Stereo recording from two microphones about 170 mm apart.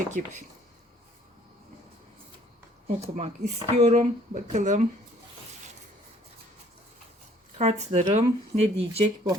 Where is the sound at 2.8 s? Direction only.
40° right (ahead or behind).